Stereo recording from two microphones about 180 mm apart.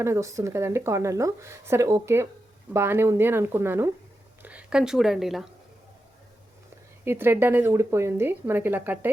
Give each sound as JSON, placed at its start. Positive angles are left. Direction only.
{"t": 0.0, "sound": "speech", "side_deg": -15}
{"t": 7.0, "sound": "speech", "side_deg": -10}